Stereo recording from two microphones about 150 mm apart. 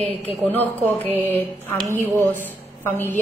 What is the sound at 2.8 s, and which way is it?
Speech, 15° left (ahead or behind).